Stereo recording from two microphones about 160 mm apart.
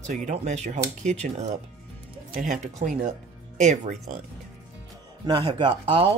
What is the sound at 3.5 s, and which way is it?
Speech, 50° right (ahead or behind).